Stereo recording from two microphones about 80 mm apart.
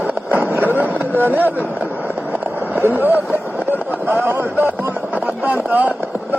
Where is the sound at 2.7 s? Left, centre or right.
Right.